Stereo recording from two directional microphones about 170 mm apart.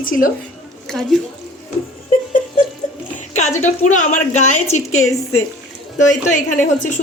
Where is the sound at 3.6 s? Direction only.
45° left (ahead or behind).